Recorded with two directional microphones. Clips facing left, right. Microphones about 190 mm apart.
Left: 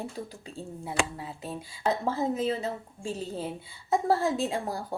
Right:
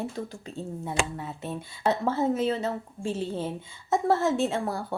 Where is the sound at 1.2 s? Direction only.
35° left (ahead or behind).